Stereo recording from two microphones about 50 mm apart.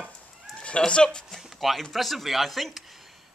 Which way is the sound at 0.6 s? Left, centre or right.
Centre.